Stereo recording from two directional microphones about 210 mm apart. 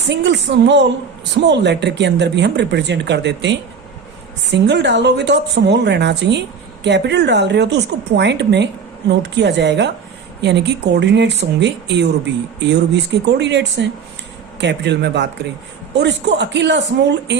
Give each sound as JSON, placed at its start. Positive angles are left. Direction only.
{"t": 0.1, "sound": "speech", "side_deg": -55}
{"t": 4.6, "sound": "speech", "side_deg": -55}